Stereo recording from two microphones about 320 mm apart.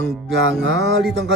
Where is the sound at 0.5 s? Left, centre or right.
Centre.